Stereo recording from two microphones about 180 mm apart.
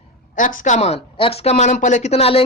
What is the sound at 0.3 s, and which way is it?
Speech, 45° left (ahead or behind).